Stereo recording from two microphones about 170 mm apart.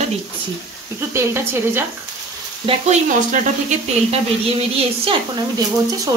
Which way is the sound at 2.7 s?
45° right (ahead or behind).